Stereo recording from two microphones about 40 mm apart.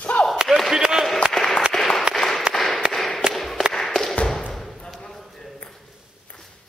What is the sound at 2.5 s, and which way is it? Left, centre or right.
Tap, centre.